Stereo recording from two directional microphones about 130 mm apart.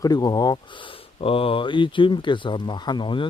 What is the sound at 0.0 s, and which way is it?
Speech, 30° left (ahead or behind).